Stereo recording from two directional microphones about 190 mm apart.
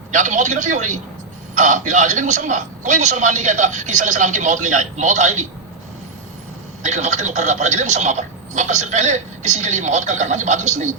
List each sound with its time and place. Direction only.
0.1 s a man's voice: 40° right (ahead or behind)
6.8 s a man's voice: 40° right (ahead or behind)